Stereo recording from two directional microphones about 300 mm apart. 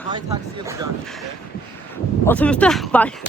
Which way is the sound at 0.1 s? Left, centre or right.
Centre.